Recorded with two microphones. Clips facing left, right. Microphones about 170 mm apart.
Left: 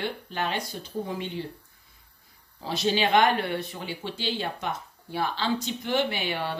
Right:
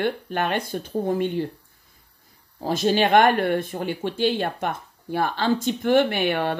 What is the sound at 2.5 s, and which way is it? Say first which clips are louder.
Speech: right 5 dB; 50° right (ahead or behind).